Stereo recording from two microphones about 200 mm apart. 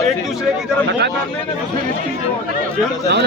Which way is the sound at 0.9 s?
60° right (ahead or behind).